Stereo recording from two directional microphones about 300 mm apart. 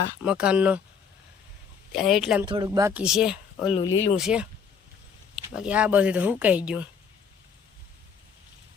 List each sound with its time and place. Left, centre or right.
0.2 s speech: centre
2.0 s speech: centre
2.5 s speech: centre
3.8 s speech: centre
4.2 s speech: centre
5.5 s speech: centre